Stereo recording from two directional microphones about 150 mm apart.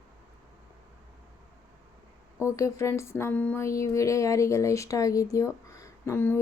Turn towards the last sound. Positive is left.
turn(degrees=15)  # may be behind; listen again after turning